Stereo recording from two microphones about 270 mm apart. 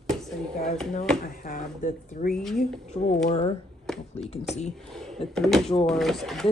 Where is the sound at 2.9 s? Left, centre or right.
Left.